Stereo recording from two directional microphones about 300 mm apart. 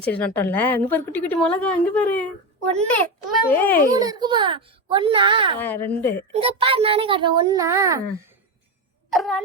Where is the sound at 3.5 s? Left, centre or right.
Centre.